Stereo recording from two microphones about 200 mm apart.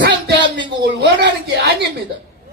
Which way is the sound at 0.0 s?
60° right (ahead or behind).